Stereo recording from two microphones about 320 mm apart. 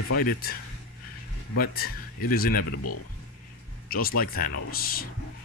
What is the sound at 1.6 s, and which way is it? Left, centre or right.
Speech, left.